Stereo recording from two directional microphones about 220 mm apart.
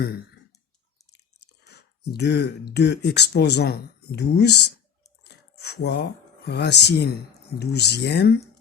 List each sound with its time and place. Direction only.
1.1 s speech: 50° left (ahead or behind)
5.2 s a sound: 50° left (ahead or behind)
6.5 s speech: 50° left (ahead or behind)